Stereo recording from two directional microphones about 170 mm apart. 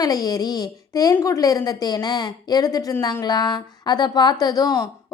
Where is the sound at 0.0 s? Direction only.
20° left (ahead or behind).